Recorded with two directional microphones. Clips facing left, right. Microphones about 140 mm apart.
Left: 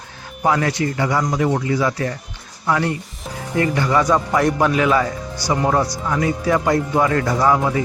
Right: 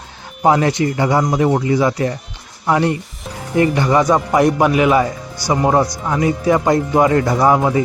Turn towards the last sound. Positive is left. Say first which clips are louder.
# right 3 dB
turn(degrees=-25)  # may be behind; listen again after turning